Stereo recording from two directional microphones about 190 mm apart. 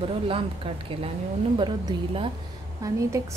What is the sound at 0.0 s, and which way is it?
A woman's voice, 30° right (ahead or behind).